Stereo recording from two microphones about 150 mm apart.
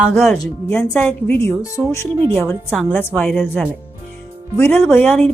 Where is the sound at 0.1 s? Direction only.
5° left (ahead or behind).